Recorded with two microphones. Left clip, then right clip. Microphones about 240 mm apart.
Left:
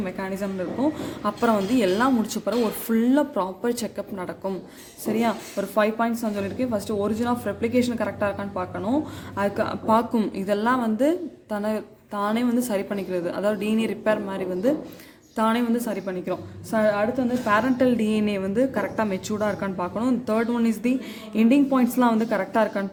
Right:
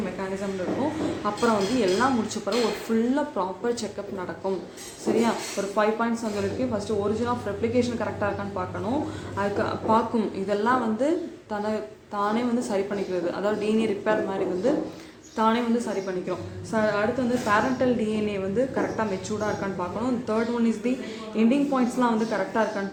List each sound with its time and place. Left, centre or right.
1.2 s a woman's voice: left